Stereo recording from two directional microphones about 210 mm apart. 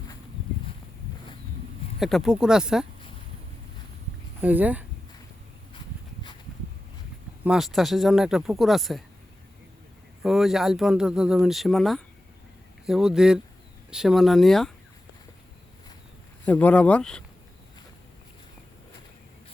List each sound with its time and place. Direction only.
2.0 s speech: centre (ahead or behind)
4.4 s speech: 10° right (ahead or behind)
7.4 s speech: centre (ahead or behind)
10.2 s speech: centre (ahead or behind)
16.5 s speech: 5° left (ahead or behind)